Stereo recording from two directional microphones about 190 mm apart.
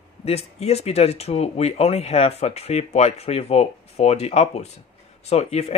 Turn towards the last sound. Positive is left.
turn(degrees=35)  # may be behind; listen again after turning